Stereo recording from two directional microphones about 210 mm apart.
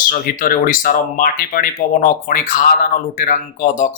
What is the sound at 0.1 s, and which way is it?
Speech, 40° left (ahead or behind).